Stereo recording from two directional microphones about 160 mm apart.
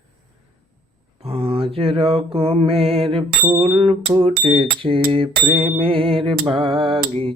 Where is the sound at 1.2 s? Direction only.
35° right (ahead or behind).